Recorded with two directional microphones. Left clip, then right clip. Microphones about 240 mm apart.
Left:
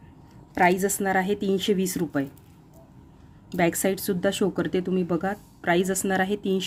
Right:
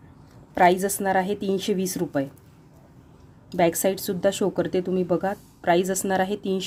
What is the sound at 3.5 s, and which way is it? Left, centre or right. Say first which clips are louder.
Speech: right 2 dB; centre.